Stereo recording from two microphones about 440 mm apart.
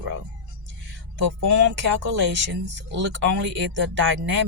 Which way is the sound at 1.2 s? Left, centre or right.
Right.